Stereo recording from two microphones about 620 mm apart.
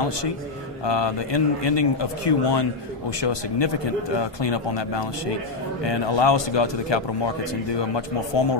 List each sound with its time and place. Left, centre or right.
0.8 s a man's voice: left